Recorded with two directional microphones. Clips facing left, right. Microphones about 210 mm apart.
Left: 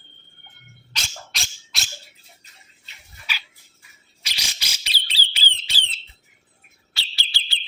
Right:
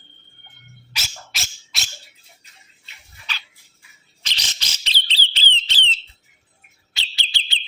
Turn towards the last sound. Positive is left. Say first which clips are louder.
# right 2 dB
turn(degrees=-20)  # may be behind; listen again after turning